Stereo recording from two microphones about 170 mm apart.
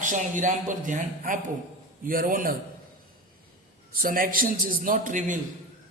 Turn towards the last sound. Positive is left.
turn(degrees=-50)  # may be behind; listen again after turning